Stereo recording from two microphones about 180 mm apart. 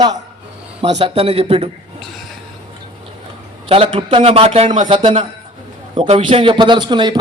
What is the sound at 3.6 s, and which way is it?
A man's voice, 30° right (ahead or behind).